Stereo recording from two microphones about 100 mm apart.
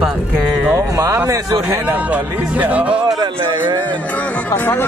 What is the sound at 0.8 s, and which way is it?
Speech, 30° right (ahead or behind).